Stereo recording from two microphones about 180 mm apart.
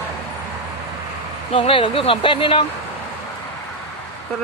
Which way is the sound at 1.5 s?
30° left (ahead or behind).